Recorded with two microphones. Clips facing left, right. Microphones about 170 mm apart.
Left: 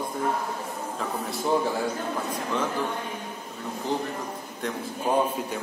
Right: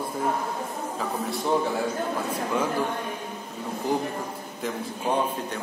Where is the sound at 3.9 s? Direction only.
10° right (ahead or behind).